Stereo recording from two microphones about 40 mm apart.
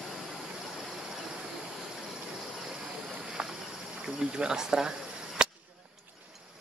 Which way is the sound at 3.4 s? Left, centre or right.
Centre.